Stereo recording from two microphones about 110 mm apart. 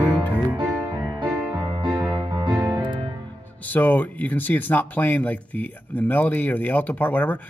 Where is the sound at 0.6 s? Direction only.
30° right (ahead or behind).